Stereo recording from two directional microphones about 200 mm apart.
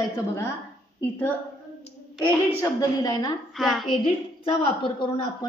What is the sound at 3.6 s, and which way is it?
Speech, centre (ahead or behind).